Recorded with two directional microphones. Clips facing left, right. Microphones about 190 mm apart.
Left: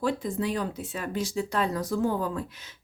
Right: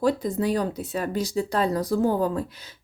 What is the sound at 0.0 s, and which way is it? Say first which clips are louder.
Speech: right 5 dB; 40° right (ahead or behind).